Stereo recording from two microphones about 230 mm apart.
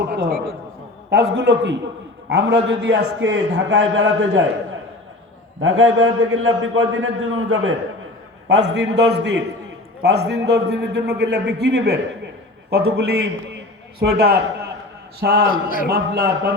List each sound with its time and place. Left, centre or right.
0.2 s a man's voice: right
5.5 s a man's voice: right